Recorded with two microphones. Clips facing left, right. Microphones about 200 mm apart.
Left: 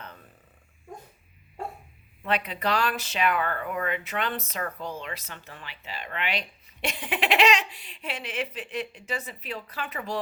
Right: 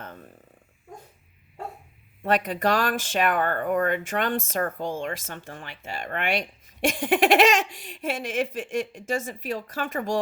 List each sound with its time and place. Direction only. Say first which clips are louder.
2.2 s speech: right 5 dB; 45° right (ahead or behind)